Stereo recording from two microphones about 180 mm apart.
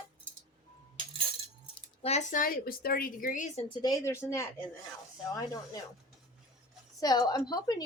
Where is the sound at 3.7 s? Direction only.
20° left (ahead or behind).